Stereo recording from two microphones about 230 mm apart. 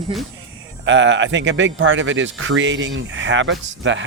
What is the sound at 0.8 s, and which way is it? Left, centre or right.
Speech, right.